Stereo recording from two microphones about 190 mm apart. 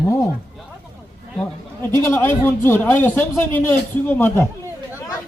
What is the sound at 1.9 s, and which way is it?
Speech, 10° left (ahead or behind).